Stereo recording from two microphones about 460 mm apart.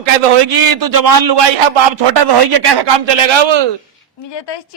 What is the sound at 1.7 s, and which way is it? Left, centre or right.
A man's voice, right.